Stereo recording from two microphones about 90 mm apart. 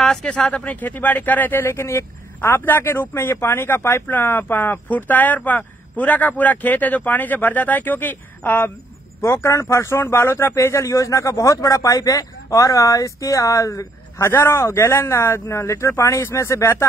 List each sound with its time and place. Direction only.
0.0 s speech: 5° left (ahead or behind)
9.2 s speech: 30° left (ahead or behind)